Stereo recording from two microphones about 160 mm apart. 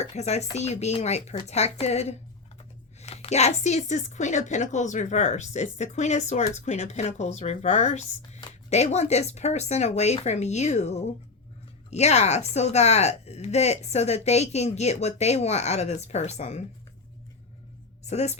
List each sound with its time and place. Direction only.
0.0 s a woman's voice: 45° left (ahead or behind)
18.0 s a woman's voice: 45° left (ahead or behind)